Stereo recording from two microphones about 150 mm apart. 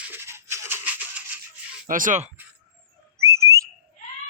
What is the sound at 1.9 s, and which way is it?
Speech, 60° right (ahead or behind).